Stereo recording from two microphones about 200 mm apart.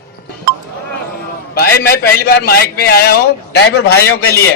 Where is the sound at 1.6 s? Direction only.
50° left (ahead or behind).